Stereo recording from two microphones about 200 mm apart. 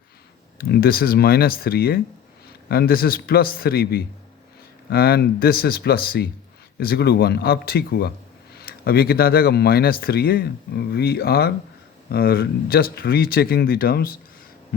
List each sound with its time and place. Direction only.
0.6 s speech: 50° left (ahead or behind)